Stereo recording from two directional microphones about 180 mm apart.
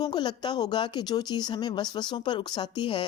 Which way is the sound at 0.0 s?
25° left (ahead or behind).